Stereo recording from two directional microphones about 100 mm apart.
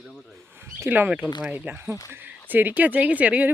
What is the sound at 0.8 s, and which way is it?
Speech, 20° right (ahead or behind).